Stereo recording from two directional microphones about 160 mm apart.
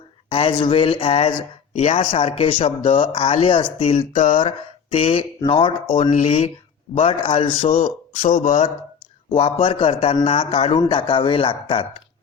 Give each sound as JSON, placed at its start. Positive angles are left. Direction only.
{"t": 0.3, "sound": "speech", "side_deg": 35}
{"t": 1.8, "sound": "speech", "side_deg": 50}
{"t": 3.9, "sound": "a sound", "side_deg": 55}
{"t": 4.9, "sound": "speech", "side_deg": 40}
{"t": 6.1, "sound": "speech", "side_deg": 50}
{"t": 7.8, "sound": "speech", "side_deg": 55}
{"t": 9.3, "sound": "speech", "side_deg": 35}